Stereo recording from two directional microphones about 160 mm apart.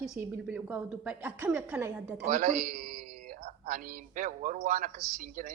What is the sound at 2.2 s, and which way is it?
A man's voice, 55° right (ahead or behind).